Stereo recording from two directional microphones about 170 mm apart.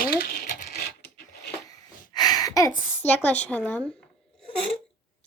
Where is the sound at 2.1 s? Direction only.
25° left (ahead or behind).